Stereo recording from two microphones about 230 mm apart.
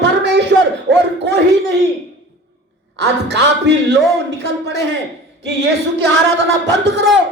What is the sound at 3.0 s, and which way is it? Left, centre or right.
Speech, right.